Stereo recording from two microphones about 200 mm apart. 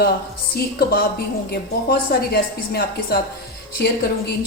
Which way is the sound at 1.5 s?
50° left (ahead or behind).